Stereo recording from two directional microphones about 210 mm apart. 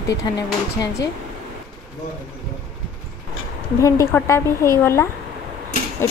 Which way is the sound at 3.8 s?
15° left (ahead or behind).